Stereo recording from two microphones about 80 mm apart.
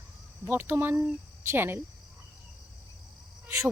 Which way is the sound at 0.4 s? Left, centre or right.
Right.